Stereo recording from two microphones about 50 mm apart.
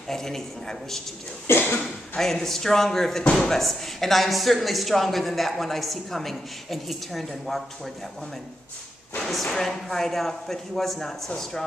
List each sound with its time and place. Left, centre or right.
0.1 s speech: centre
1.5 s a sound: left
2.1 s a woman's voice: centre
9.3 s speech: centre